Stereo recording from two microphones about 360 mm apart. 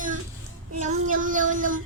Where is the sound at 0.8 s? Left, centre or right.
Right.